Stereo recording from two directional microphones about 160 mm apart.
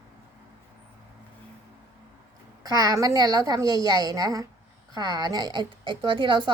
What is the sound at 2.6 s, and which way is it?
A woman's voice, 25° right (ahead or behind).